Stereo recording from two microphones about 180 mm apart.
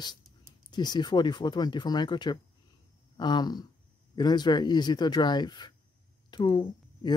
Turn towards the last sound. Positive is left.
turn(degrees=25)  # may be behind; listen again after turning